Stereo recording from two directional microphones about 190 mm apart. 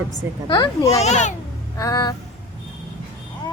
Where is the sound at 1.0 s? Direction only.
40° left (ahead or behind).